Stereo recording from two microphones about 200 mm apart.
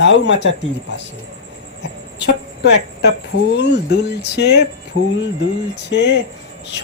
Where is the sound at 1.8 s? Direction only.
60° left (ahead or behind).